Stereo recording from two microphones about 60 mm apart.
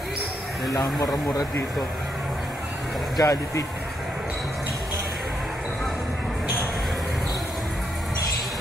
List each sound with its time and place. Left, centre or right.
0.7 s speech: left
3.2 s speech: left